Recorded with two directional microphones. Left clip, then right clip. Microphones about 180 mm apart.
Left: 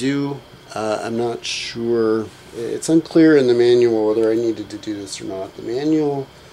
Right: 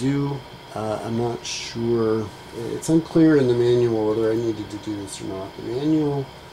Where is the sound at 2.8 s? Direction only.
Centre (ahead or behind).